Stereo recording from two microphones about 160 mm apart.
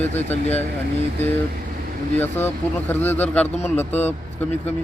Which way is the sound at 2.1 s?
15° left (ahead or behind).